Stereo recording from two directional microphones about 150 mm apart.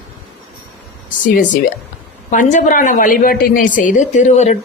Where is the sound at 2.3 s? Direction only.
60° left (ahead or behind).